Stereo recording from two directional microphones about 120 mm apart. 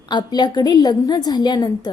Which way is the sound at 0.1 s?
35° left (ahead or behind).